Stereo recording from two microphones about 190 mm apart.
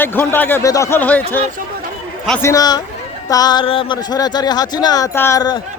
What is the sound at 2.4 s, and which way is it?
Speech, 15° left (ahead or behind).